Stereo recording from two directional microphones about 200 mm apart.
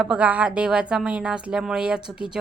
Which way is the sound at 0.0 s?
5° right (ahead or behind).